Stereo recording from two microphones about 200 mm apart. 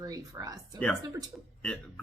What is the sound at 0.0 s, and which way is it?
Speech, 15° right (ahead or behind).